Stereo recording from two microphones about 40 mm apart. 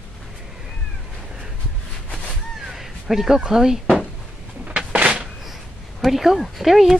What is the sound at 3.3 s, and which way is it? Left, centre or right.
Speech, centre.